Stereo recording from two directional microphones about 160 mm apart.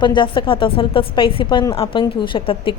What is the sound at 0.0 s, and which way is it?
A woman's voice, 30° left (ahead or behind).